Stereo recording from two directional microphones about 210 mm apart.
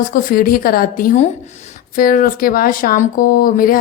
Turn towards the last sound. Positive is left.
turn(degrees=40)  # may be behind; listen again after turning